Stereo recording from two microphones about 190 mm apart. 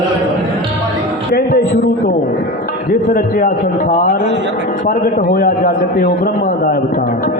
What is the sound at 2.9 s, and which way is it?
A man's voice, 50° left (ahead or behind).